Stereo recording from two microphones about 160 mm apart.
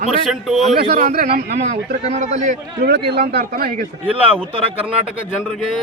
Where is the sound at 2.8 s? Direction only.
85° right; by 3.9 s 70° right (ahead or behind).